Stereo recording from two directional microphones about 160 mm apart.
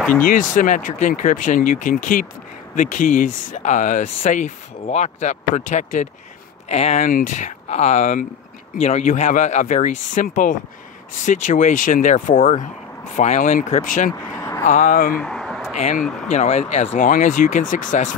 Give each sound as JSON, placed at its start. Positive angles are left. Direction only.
{"t": 0.2, "sound": "speech", "side_deg": 60}
{"t": 7.1, "sound": "speech", "side_deg": 55}
{"t": 8.7, "sound": "speech", "side_deg": 40}
{"t": 14.3, "sound": "vehicle", "side_deg": 20}
{"t": 14.6, "sound": "speech", "side_deg": 50}
{"t": 15.2, "sound": "a sound", "side_deg": 0}
{"t": 15.7, "sound": "speech", "side_deg": 45}
{"t": 16.0, "sound": "speech", "side_deg": 5}
{"t": 16.3, "sound": "speech", "side_deg": 45}